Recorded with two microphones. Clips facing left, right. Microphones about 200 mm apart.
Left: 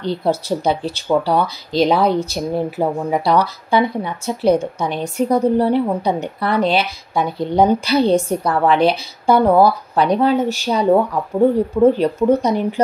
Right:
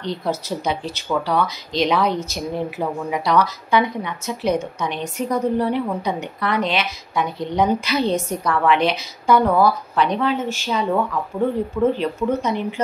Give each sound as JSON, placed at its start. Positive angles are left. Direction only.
{"t": 0.0, "sound": "speech", "side_deg": 30}